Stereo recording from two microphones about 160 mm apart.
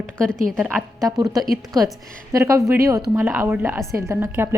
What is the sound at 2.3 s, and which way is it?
A woman's voice, 20° right (ahead or behind).